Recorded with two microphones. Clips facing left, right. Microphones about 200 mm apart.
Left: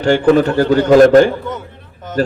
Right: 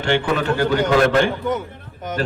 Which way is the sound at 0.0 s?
40° left (ahead or behind).